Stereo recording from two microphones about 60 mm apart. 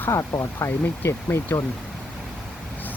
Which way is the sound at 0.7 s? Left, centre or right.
Left.